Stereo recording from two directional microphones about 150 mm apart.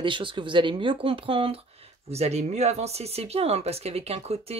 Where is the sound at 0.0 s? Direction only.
35° right (ahead or behind).